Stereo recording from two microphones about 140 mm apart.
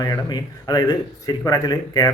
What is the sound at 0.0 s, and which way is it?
Speech, 30° left (ahead or behind).